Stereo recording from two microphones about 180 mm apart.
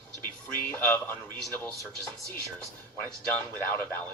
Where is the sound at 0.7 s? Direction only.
10° left (ahead or behind).